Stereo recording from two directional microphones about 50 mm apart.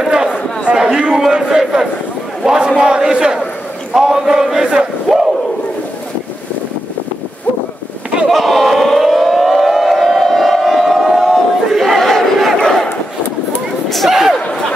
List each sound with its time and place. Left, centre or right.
0.0 s a sound: centre
1.3 s crowd: centre
2.4 s a sound: centre
2.8 s speech: centre
3.9 s battle cry: centre
8.3 s civil defense siren: centre
13.8 s slam: centre